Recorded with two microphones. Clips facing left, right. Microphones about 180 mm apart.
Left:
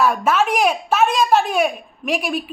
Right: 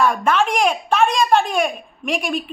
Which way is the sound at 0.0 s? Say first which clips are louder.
Even; 5° left (ahead or behind).